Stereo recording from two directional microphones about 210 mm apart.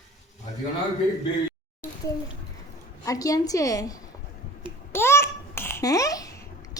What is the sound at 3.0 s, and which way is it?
A woman's voice, 15° left (ahead or behind).